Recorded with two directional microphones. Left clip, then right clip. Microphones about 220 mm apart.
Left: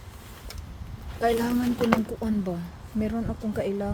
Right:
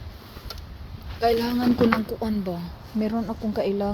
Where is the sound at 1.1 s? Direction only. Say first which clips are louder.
Right 2 dB; 15° right (ahead or behind).